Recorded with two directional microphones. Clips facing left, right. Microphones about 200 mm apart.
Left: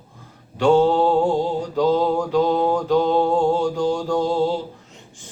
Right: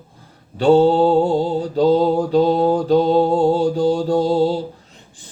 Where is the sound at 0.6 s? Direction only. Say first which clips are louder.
Right 3 dB; 35° right (ahead or behind).